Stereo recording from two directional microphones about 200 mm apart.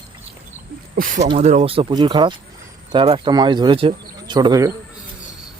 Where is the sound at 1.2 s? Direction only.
30° right (ahead or behind).